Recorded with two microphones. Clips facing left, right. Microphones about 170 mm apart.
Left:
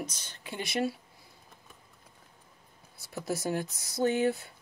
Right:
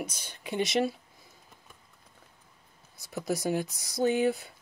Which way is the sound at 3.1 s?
15° right (ahead or behind).